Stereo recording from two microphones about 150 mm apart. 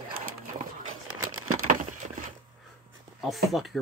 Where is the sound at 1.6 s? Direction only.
60° right (ahead or behind).